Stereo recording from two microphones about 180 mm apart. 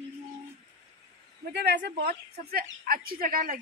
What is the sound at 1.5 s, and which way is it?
A woman's voice, 70° right (ahead or behind).